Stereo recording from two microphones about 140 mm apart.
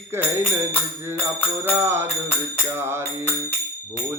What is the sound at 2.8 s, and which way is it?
Speech, 15° right (ahead or behind).